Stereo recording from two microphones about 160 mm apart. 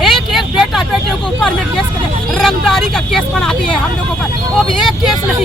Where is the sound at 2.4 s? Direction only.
Centre (ahead or behind).